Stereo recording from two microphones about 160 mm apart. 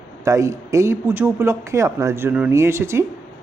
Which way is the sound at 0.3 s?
20° right (ahead or behind).